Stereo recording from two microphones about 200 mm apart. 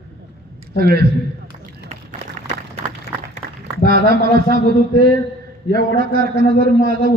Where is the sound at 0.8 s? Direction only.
50° right (ahead or behind).